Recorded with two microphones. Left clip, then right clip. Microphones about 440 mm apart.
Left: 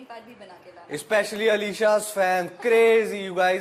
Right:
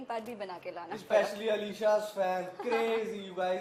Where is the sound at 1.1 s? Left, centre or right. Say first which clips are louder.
Left 7 dB; left.